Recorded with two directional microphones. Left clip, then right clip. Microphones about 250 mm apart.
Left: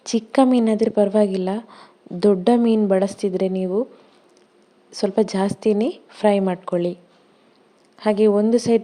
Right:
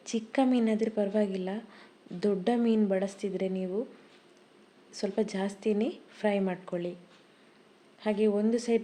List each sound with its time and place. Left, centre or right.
0.0 s a woman's voice: left
4.9 s a woman's voice: left
7.9 s a woman's voice: left